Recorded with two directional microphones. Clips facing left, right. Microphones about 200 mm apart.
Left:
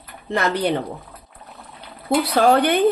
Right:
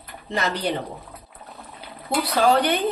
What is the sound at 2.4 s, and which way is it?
Speech, 55° left (ahead or behind).